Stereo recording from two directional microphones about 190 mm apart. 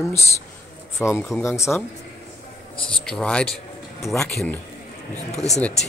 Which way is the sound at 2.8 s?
5° left (ahead or behind).